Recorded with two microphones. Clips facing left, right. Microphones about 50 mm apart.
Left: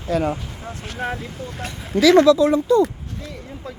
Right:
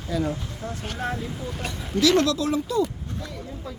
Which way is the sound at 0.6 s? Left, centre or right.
Left.